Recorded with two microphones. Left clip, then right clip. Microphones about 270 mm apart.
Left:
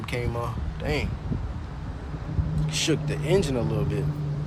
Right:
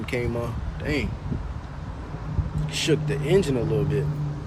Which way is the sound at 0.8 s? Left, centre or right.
Left.